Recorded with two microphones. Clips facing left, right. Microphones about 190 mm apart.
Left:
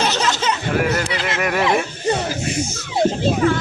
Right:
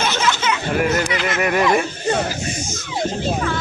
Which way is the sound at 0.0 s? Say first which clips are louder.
Left 1 dB; 40° left (ahead or behind).